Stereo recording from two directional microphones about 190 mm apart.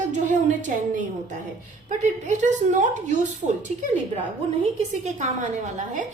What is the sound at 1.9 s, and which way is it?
A woman's voice, 40° right (ahead or behind).